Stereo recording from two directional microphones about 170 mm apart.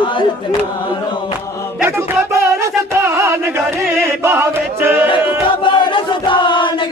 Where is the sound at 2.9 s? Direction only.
15° right (ahead or behind).